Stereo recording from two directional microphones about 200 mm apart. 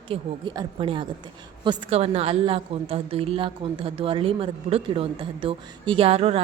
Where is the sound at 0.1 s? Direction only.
20° right (ahead or behind).